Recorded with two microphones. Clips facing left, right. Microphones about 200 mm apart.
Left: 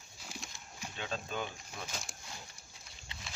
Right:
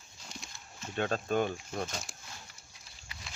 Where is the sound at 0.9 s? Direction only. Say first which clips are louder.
Right 9 dB; 55° right (ahead or behind).